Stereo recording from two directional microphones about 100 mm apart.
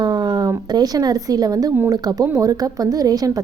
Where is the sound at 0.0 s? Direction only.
40° right (ahead or behind).